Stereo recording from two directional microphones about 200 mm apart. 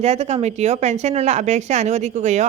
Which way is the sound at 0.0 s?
35° right (ahead or behind).